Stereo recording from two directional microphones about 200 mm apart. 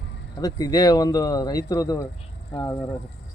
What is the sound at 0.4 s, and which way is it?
Speech, 20° left (ahead or behind).